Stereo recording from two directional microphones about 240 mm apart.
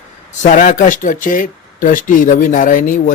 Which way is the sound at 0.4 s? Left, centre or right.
Left.